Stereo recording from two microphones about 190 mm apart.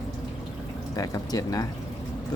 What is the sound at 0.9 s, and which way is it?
Speech, 20° left (ahead or behind).